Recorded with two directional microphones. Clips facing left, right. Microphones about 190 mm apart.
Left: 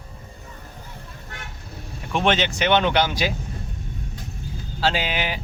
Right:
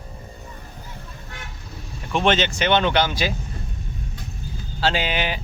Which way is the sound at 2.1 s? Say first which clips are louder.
Right 1 dB; 10° left (ahead or behind).